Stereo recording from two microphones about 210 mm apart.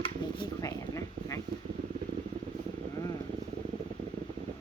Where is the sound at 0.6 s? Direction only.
15° left (ahead or behind).